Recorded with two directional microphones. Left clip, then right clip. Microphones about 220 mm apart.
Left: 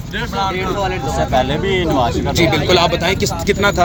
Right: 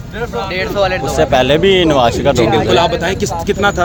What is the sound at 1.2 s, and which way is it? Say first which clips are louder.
Speech: right 6 dB; 50° right (ahead or behind).